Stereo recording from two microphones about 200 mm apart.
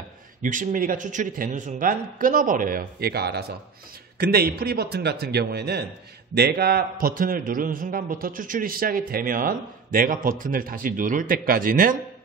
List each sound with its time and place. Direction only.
0.4 s a man's voice: 40° right (ahead or behind)